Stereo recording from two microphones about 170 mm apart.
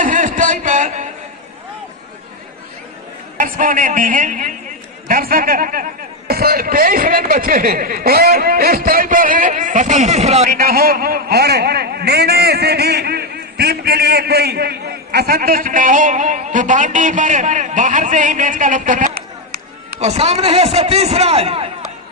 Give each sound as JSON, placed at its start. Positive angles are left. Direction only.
{"t": 0.0, "sound": "a sound", "side_deg": -50}
{"t": 3.3, "sound": "a man's voice", "side_deg": -55}
{"t": 10.5, "sound": "a man's voice", "side_deg": -60}
{"t": 20.0, "sound": "a man's voice", "side_deg": -40}